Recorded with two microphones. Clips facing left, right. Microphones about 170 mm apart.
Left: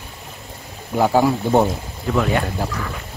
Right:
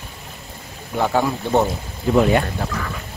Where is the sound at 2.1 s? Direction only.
20° right (ahead or behind).